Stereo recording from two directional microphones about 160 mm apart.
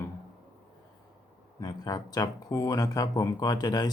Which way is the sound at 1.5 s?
25° left (ahead or behind).